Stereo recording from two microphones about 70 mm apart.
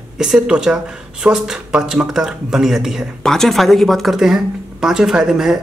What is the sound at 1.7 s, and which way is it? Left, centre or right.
Speech, centre.